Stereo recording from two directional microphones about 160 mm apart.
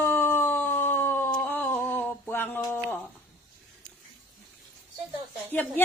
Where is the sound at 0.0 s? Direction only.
15° left (ahead or behind).